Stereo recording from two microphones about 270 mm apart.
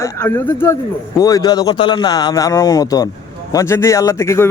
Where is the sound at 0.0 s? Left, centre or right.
Centre.